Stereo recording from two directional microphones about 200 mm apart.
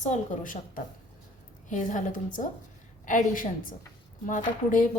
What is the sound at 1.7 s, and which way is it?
Speech, 40° left (ahead or behind).